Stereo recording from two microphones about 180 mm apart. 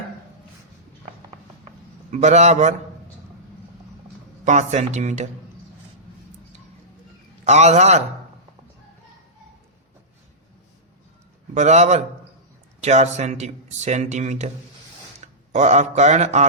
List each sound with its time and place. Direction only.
2.1 s speech: 40° right (ahead or behind)
4.4 s speech: 40° right (ahead or behind)
7.4 s speech: 40° right (ahead or behind)
11.5 s a man's voice: 40° right (ahead or behind)